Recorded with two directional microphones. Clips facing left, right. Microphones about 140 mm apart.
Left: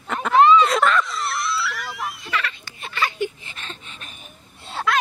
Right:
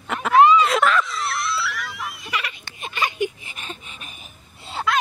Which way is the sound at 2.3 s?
15° right (ahead or behind).